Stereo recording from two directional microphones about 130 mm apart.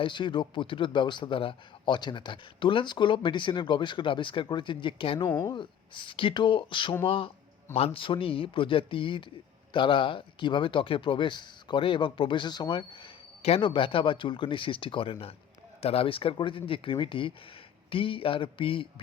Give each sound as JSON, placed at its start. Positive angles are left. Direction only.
{"t": 0.0, "sound": "a man's voice", "side_deg": 35}
{"t": 13.4, "sound": "a man's voice", "side_deg": 45}